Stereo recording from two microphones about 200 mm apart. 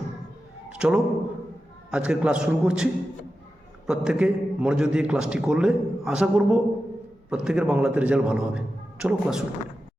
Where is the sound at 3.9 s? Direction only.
5° right (ahead or behind).